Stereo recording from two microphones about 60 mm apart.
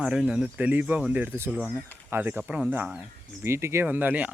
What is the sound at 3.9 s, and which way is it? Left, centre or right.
Speech, right.